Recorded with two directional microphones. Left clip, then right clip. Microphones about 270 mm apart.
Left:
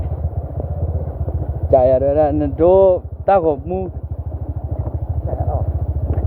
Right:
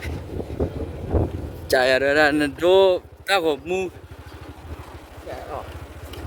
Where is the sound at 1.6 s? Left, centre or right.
Right.